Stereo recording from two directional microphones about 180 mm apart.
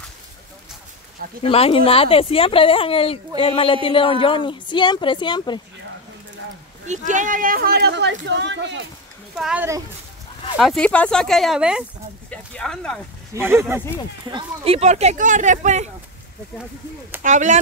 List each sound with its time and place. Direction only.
1.4 s speech: 30° left (ahead or behind)
7.1 s speech: 45° right (ahead or behind); by 8.8 s 85° right
9.4 s speech: 5° right (ahead or behind)
13.3 s speech: 15° right (ahead or behind)
14.2 s speech: 30° right (ahead or behind)
17.2 s speech: 45° right (ahead or behind)